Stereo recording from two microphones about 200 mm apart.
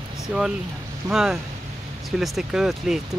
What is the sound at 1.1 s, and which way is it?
Speech, 5° right (ahead or behind).